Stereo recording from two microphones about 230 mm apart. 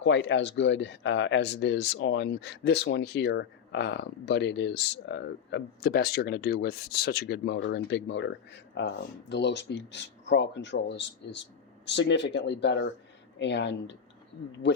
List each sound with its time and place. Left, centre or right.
0.0 s speech: left